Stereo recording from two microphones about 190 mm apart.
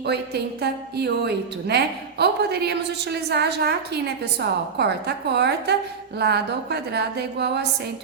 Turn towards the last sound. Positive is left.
turn(degrees=-60)  # may be behind; listen again after turning